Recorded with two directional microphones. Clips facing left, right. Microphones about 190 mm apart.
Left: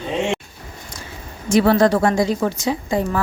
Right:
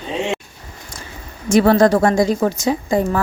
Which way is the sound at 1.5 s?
45° right (ahead or behind).